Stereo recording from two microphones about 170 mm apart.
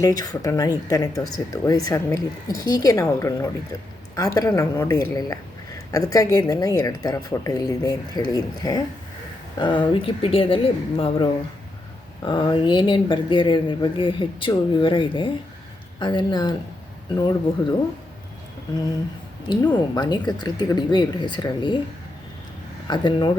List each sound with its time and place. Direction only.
0.0 s a woman's voice: 20° left (ahead or behind)
20.0 s speech: 25° left (ahead or behind)
22.9 s speech: 25° left (ahead or behind)